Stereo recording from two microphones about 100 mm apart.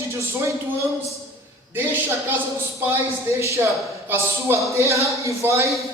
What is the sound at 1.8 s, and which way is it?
A man's voice, 20° right (ahead or behind).